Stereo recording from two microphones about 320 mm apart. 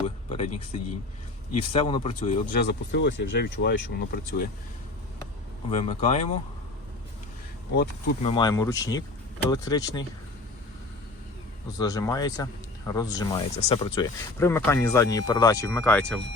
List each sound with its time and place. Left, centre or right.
0.3 s speech: left
1.7 s speech: centre
5.7 s speech: left
7.8 s speech: left
8.3 s speech: centre
11.8 s speech: centre